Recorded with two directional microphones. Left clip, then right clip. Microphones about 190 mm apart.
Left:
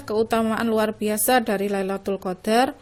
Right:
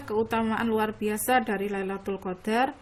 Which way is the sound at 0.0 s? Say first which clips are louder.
Left 5 dB; 35° left (ahead or behind).